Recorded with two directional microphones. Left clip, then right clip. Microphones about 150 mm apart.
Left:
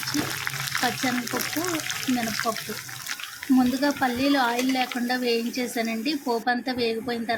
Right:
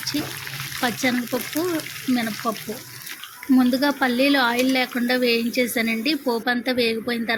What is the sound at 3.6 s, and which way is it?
Speech, 20° right (ahead or behind).